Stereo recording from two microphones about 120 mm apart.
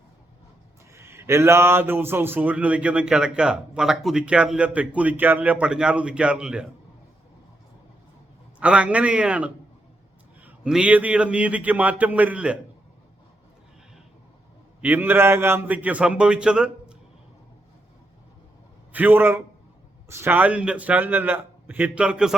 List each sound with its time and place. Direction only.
0.9 s speech: 20° right (ahead or behind)
8.6 s speech: 10° right (ahead or behind)
14.8 s speech: 15° right (ahead or behind)
18.9 s speech: 15° right (ahead or behind)